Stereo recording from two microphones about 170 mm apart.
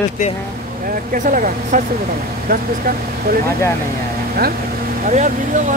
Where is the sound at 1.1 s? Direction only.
50° right (ahead or behind).